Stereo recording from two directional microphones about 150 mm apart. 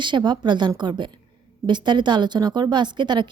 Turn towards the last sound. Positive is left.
turn(degrees=-30)  # may be behind; listen again after turning